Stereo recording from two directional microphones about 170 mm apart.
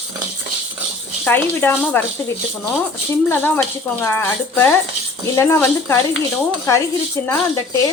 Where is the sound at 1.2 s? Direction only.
10° left (ahead or behind).